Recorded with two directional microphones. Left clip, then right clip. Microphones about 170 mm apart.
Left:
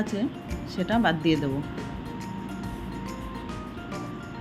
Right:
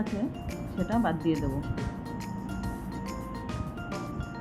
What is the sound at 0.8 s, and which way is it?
Speech, 20° left (ahead or behind).